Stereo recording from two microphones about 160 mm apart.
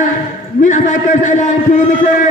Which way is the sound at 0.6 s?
50° left (ahead or behind).